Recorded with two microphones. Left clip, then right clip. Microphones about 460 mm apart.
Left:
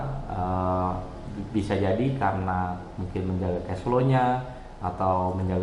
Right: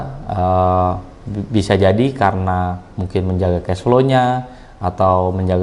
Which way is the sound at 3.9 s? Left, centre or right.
Right.